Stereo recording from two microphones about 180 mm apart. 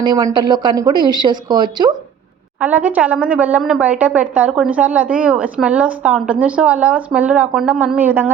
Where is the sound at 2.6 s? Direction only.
10° right (ahead or behind).